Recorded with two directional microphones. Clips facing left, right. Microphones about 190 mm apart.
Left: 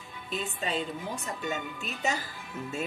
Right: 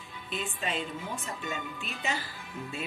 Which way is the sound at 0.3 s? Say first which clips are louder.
Left 2 dB; 40° left (ahead or behind).